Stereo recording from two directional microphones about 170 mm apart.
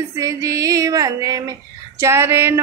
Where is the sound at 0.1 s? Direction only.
20° right (ahead or behind).